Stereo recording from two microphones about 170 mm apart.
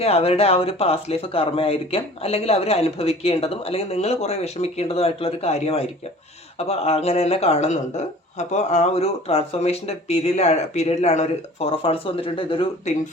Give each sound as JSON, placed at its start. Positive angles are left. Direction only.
{"t": 0.0, "sound": "speech", "side_deg": 35}